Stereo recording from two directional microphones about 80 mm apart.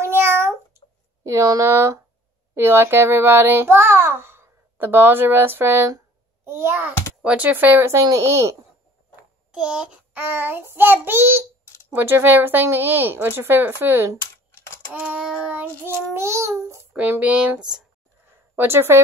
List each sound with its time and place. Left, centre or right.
0.0 s cat: right
1.2 s child singing: right
2.5 s a child's voice: right
7.2 s speech: centre
8.0 s child singing: right
9.5 s a child's voice: centre
10.1 s speech: right
14.1 s computer keyboard: left
14.9 s child singing: centre
16.1 s child singing: right
16.9 s speech: right
18.6 s speech: right